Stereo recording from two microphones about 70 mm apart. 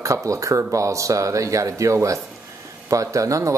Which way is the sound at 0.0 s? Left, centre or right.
Right.